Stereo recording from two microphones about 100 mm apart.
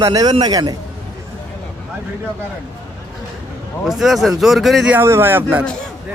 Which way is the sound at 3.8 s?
Centre (ahead or behind).